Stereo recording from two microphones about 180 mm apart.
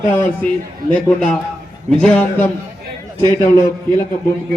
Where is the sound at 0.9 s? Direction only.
5° left (ahead or behind).